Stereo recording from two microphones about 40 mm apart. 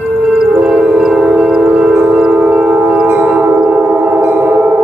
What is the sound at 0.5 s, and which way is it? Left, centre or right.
Music, centre.